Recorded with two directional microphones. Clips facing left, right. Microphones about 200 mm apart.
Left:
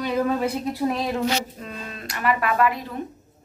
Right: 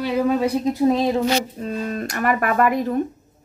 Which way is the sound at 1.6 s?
40° right (ahead or behind).